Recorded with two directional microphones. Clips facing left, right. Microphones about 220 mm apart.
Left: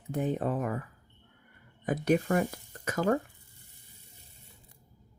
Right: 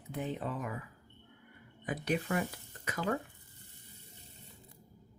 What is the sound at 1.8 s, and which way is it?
Speech, 45° left (ahead or behind).